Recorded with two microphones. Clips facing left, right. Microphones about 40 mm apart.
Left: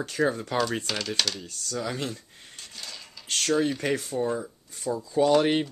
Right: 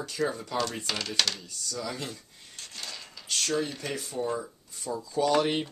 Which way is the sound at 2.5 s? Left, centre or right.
Centre.